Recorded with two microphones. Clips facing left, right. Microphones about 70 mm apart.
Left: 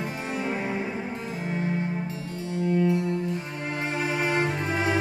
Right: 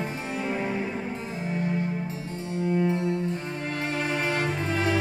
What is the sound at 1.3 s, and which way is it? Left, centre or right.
Music, left.